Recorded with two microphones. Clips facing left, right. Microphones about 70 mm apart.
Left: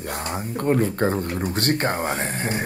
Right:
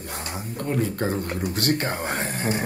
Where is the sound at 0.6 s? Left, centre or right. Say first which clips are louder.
Left 5 dB; left.